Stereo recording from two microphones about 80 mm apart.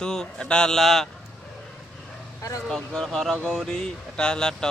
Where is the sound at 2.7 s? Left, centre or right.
Centre.